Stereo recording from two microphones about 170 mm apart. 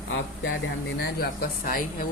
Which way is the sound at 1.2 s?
60° left (ahead or behind).